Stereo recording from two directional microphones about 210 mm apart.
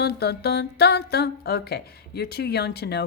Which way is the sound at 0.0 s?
50° left (ahead or behind).